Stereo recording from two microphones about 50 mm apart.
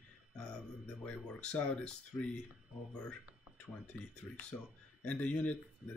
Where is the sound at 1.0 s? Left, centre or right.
Left.